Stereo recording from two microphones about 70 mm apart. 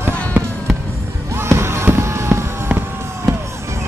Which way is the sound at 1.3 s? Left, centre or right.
Right.